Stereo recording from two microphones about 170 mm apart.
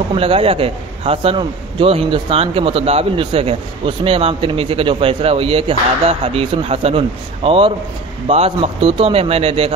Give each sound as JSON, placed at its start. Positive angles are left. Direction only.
{"t": 0.1, "sound": "a man's voice", "side_deg": -35}